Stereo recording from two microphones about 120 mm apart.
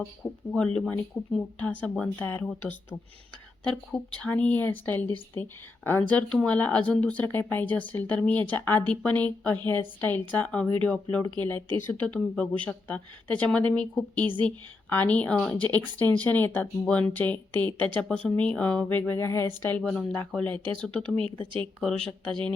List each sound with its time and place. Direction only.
0.5 s speech: 5° left (ahead or behind)
19.8 s speech: 10° left (ahead or behind)